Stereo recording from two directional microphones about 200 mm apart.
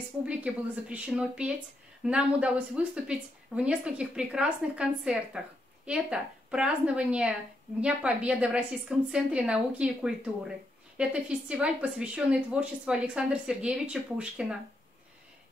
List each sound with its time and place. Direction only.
0.2 s a woman's voice: 5° right (ahead or behind)